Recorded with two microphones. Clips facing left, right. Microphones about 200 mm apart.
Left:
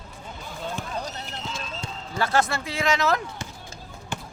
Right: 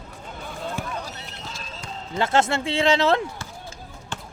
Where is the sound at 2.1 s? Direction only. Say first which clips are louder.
Right 3 dB; 25° right (ahead or behind).